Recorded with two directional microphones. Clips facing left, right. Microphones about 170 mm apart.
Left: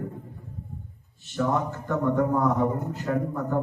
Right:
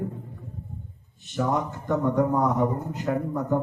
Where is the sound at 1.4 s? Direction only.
15° right (ahead or behind).